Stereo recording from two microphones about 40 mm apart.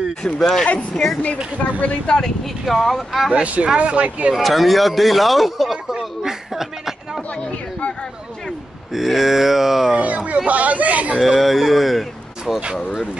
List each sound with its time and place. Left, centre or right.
0.2 s speech: centre
1.8 s speech: left
2.6 s speech: centre
3.6 s speech: right
4.4 s speech: centre
8.9 s speech: centre
9.9 s speech: right
11.1 s speech: centre